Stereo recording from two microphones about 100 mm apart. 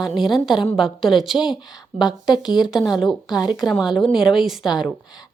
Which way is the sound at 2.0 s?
45° left (ahead or behind).